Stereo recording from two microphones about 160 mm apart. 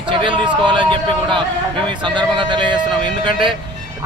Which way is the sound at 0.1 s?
30° right (ahead or behind).